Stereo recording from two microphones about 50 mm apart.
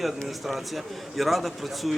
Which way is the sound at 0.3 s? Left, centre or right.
Centre.